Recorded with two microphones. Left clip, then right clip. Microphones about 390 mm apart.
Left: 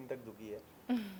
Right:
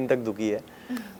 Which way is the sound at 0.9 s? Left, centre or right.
Left.